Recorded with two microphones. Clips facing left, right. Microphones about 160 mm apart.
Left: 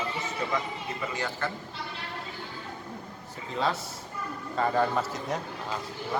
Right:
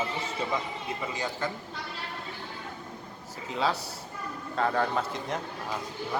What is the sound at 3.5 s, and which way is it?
Speech, centre (ahead or behind).